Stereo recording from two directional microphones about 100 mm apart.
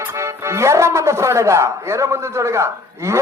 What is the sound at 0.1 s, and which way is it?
Speech, 30° right (ahead or behind).